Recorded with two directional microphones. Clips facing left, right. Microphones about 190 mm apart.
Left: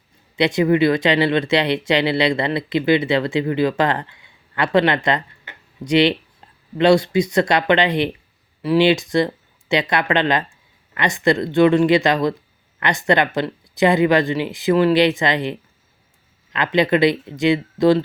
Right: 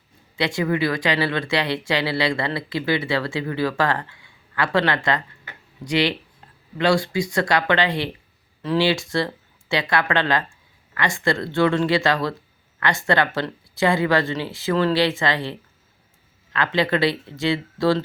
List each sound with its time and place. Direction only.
0.3 s speech: 20° left (ahead or behind)